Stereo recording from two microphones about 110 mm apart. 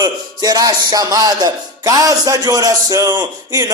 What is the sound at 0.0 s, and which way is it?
Speech, 35° right (ahead or behind).